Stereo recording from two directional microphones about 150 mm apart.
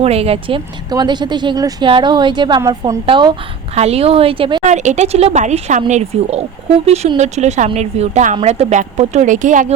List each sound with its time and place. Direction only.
0.0 s a woman's voice: 45° right (ahead or behind)
3.8 s speech: 45° right (ahead or behind)
4.6 s speech: 55° right (ahead or behind)